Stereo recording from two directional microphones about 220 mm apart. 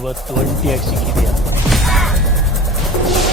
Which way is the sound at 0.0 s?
Centre (ahead or behind).